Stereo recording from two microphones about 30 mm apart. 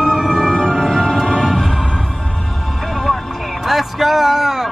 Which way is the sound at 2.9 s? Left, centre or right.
Centre.